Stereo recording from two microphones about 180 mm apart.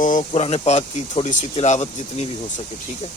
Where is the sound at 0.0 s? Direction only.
45° left (ahead or behind).